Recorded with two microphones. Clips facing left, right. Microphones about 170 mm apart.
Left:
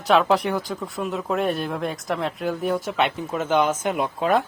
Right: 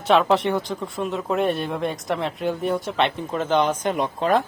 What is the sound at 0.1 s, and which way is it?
Speech, centre (ahead or behind).